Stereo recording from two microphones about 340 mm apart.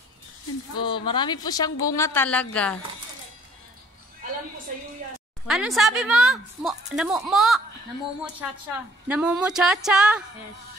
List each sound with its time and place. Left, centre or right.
0.7 s speech: centre
5.5 s a woman's voice: centre
9.0 s a woman's voice: centre